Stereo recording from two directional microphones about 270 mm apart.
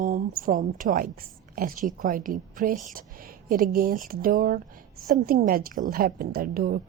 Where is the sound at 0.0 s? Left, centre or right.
Right.